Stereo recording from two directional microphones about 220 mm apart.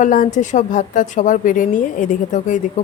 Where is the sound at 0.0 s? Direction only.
35° left (ahead or behind).